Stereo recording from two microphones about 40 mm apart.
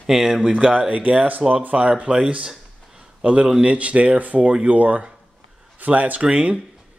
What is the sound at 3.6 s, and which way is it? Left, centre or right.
Speech, right.